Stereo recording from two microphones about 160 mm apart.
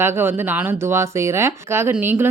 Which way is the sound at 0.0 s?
15° right (ahead or behind).